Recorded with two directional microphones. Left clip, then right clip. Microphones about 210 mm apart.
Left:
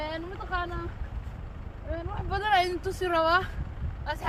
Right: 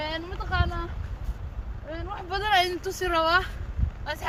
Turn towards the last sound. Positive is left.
turn(degrees=0)  # may be behind; listen again after turning